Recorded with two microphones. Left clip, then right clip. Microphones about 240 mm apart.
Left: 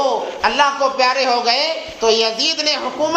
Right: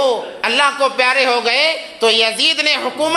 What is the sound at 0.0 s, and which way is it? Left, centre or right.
A man's voice, right.